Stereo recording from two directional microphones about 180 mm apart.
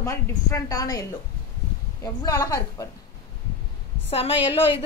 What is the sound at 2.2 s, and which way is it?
Speech, 20° left (ahead or behind).